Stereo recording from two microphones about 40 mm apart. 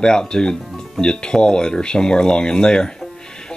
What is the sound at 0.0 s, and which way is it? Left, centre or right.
Speech, centre.